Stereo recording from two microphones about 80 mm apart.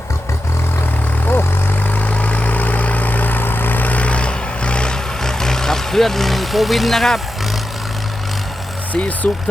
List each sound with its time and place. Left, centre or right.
2.0 s vehicle: centre
8.9 s speech: centre